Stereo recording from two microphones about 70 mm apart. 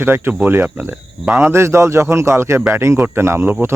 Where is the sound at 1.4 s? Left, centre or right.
Right.